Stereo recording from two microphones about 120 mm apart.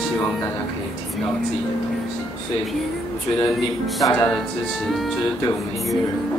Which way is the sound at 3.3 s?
40° left (ahead or behind).